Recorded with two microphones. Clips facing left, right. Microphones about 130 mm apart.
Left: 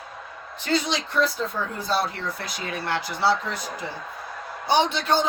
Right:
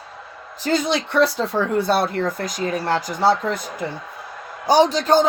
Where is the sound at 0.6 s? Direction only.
50° right (ahead or behind).